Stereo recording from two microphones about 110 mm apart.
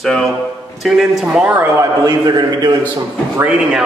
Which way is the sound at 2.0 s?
35° right (ahead or behind).